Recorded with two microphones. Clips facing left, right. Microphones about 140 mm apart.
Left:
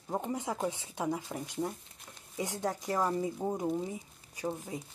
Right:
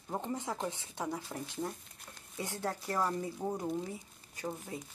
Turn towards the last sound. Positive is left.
turn(degrees=15)  # may be behind; listen again after turning